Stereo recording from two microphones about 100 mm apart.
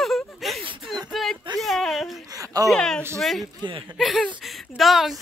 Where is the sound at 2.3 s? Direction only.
35° right (ahead or behind).